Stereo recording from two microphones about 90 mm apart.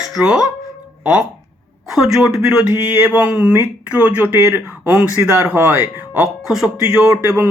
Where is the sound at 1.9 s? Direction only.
5° right (ahead or behind); by 5.8 s 20° right (ahead or behind).